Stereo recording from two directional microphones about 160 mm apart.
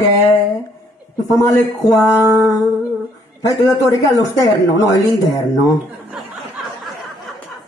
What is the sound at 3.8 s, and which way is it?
A man's voice, 20° left (ahead or behind).